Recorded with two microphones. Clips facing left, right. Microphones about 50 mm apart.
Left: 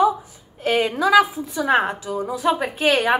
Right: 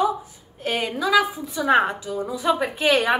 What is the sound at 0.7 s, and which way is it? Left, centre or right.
A woman's voice, centre.